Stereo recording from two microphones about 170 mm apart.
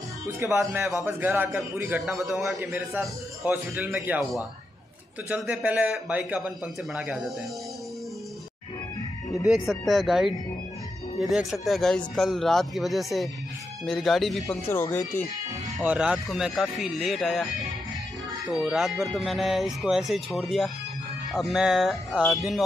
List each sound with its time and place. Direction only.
0.4 s a man's voice: 15° right (ahead or behind)
5.3 s a man's voice: 10° right (ahead or behind)
9.5 s speech: centre (ahead or behind)
14.7 s speech: 15° left (ahead or behind)
15.8 s speech: 10° right (ahead or behind)
18.5 s speech: centre (ahead or behind)